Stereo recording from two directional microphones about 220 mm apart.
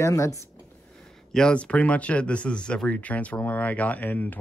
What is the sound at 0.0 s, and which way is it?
Speech, 15° left (ahead or behind).